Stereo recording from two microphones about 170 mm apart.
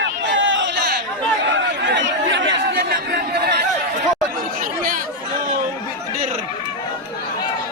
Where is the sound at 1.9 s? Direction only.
90° right.